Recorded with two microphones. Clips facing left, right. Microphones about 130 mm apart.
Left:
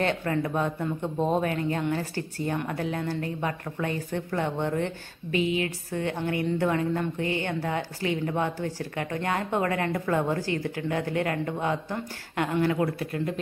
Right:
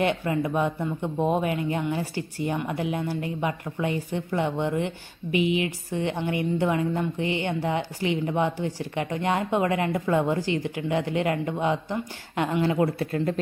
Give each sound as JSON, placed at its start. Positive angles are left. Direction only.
{"t": 0.0, "sound": "speech", "side_deg": -15}